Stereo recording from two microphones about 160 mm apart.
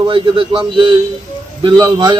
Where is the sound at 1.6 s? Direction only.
25° right (ahead or behind).